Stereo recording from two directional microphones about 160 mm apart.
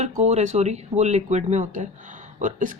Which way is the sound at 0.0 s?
45° right (ahead or behind).